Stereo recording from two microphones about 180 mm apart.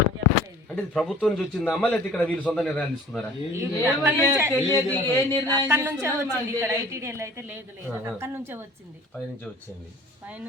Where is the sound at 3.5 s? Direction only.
15° right (ahead or behind).